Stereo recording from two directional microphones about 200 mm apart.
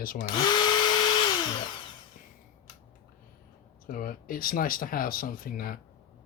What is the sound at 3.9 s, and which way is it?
Speech, 45° left (ahead or behind).